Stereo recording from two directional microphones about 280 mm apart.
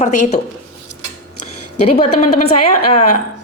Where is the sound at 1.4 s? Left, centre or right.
Left.